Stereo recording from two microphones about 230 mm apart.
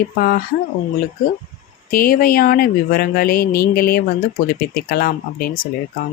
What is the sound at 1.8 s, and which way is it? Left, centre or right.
Speech, left.